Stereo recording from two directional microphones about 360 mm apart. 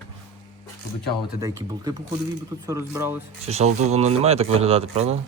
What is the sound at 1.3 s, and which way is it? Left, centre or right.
Speech, centre.